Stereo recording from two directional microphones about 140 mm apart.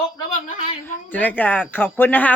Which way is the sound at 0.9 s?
10° left (ahead or behind).